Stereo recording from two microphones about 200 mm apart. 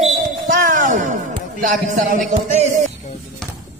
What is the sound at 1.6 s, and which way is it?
Speech, 40° right (ahead or behind).